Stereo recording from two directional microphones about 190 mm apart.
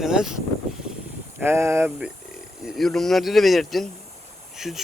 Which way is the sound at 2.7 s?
Centre (ahead or behind).